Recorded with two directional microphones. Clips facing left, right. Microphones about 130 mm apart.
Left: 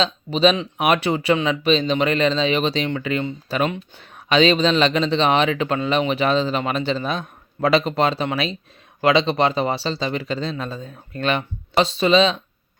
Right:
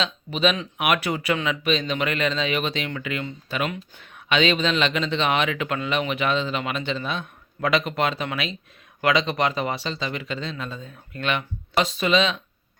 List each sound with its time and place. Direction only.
0.0 s speech: 30° left (ahead or behind)